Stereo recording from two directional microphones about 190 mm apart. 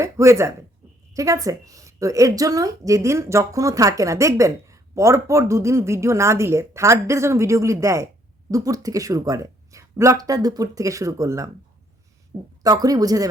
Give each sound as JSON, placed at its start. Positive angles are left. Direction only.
{"t": 0.0, "sound": "speech", "side_deg": -15}
{"t": 12.6, "sound": "speech", "side_deg": -20}